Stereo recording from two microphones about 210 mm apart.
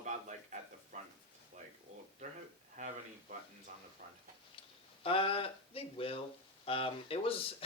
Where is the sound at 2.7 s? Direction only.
35° right (ahead or behind).